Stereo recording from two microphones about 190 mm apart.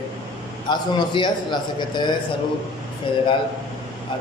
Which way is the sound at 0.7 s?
25° left (ahead or behind).